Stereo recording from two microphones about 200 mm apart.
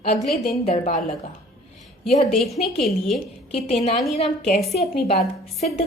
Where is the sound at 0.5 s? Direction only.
30° left (ahead or behind).